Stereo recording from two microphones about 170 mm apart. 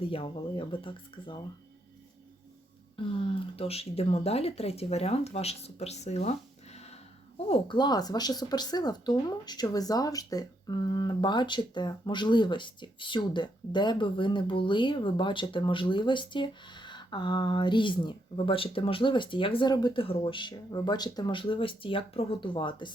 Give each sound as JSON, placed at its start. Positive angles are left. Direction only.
{"t": 0.0, "sound": "speech", "side_deg": 30}
{"t": 2.9, "sound": "speech", "side_deg": 30}